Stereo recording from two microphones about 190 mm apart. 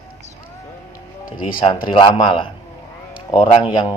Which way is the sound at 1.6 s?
25° left (ahead or behind).